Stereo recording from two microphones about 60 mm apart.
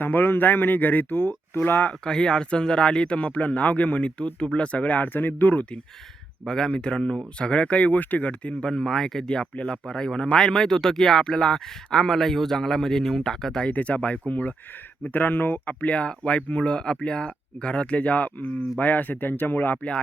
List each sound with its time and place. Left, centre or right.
0.0 s speech: left
1.9 s speech: centre
6.4 s speech: centre
8.7 s speech: centre
13.7 s speech: left